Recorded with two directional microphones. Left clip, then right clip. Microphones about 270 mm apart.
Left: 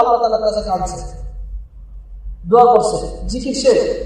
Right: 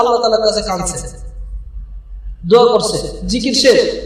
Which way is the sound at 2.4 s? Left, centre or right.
Right.